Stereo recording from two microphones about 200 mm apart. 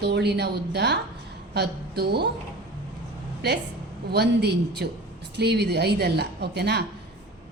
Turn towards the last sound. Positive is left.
turn(degrees=-55)  # may be behind; listen again after turning